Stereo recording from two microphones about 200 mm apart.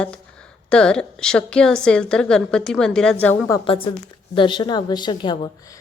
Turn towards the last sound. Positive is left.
turn(degrees=25)  # may be behind; listen again after turning